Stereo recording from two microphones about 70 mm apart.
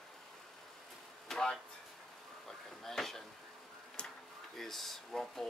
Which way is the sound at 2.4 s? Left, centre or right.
Centre.